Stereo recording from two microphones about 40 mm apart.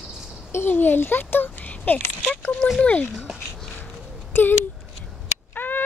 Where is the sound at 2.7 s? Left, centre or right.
Left.